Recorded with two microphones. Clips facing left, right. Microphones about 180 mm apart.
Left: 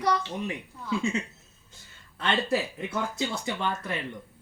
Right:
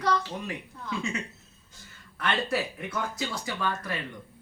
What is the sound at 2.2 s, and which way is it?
A man's voice, 25° left (ahead or behind).